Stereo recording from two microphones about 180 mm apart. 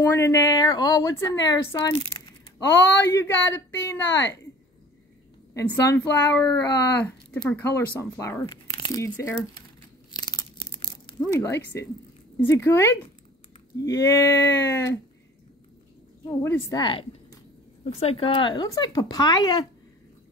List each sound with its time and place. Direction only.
0.0 s a woman's voice: 15° left (ahead or behind)
3.2 s speech: 15° left (ahead or behind)
5.5 s speech: 15° left (ahead or behind)
10.1 s crunch: 25° left (ahead or behind)
11.1 s speech: 15° left (ahead or behind)
16.3 s speech: 15° left (ahead or behind)
16.8 s a woman's voice: 25° left (ahead or behind)